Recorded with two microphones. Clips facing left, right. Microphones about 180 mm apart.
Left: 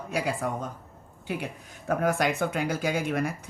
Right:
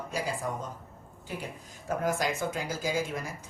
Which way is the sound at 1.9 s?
65° left (ahead or behind).